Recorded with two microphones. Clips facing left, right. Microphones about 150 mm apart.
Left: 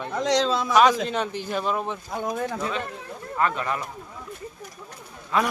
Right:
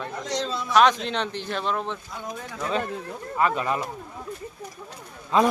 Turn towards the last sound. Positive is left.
turn(degrees=-25)  # may be behind; listen again after turning